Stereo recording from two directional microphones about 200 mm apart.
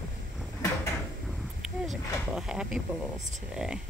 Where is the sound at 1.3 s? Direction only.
Centre (ahead or behind).